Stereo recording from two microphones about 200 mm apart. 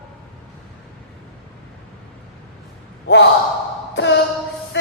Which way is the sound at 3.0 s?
60° left (ahead or behind).